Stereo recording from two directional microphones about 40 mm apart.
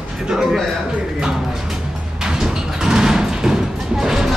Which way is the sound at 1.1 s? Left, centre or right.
Centre.